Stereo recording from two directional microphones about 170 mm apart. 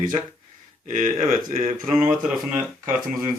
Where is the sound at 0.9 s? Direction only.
50° right (ahead or behind).